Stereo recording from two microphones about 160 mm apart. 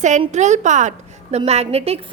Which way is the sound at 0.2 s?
45° right (ahead or behind).